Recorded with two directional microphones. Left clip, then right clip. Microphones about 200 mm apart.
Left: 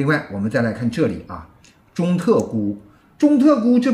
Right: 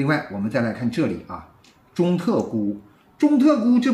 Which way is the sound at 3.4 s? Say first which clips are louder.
Left 3 dB; 5° right (ahead or behind).